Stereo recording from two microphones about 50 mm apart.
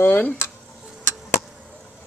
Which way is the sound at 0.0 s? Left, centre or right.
Left.